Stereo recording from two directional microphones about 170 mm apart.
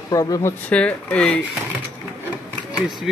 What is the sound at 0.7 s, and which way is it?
Speech, 5° left (ahead or behind).